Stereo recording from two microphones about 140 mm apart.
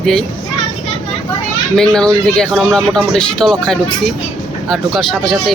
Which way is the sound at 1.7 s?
5° left (ahead or behind).